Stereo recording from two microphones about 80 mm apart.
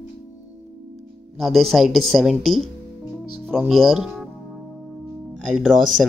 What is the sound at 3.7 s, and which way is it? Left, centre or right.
Speech, centre.